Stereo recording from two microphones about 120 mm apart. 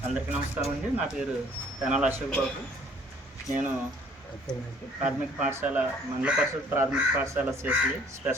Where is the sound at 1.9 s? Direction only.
10° right (ahead or behind).